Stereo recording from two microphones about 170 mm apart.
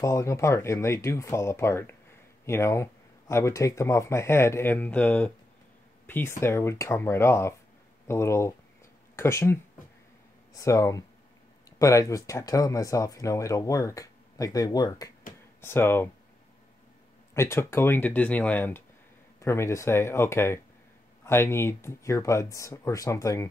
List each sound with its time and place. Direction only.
0.0 s speech: 15° left (ahead or behind)
17.3 s speech: 15° left (ahead or behind)